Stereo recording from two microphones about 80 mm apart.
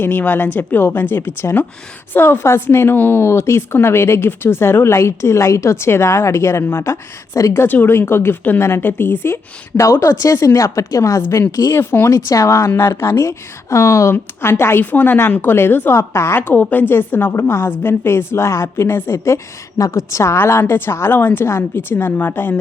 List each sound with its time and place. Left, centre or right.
0.0 s a woman's voice: left
11.7 s a woman's voice: left
12.3 s a woman's voice: left